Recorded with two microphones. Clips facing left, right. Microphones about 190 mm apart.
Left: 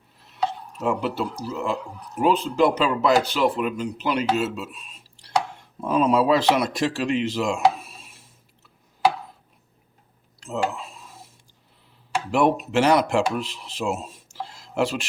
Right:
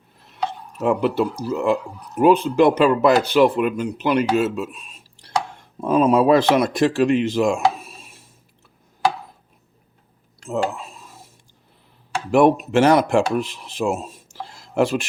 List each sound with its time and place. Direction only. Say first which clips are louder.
0.8 s speech: right 6 dB; 55° right (ahead or behind)
7.9 s dishes: right 3 dB; 45° right (ahead or behind)
10.4 s speech: right 3 dB; 50° right (ahead or behind)
12.3 s speech: right 6 dB; 50° right (ahead or behind)
14.4 s a sound: right 4 dB; 50° right (ahead or behind)